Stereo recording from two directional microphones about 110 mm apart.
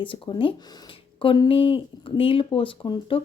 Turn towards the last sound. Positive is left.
turn(degrees=55)  # may be behind; listen again after turning